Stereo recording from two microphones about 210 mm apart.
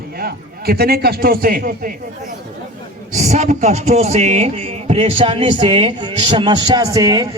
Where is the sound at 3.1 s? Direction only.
35° right (ahead or behind).